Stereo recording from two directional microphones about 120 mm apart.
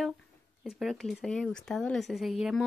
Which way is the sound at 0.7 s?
Centre (ahead or behind).